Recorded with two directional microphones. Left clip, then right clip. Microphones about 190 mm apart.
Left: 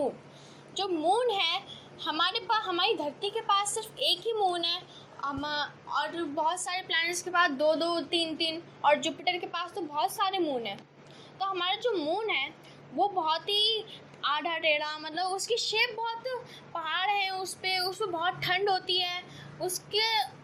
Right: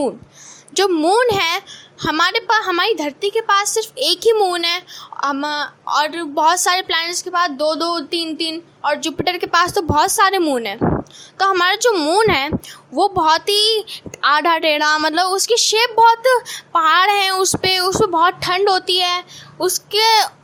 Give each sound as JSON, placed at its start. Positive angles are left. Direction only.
{"t": 0.7, "sound": "a woman's voice", "side_deg": -50}
{"t": 8.8, "sound": "a woman's voice", "side_deg": -35}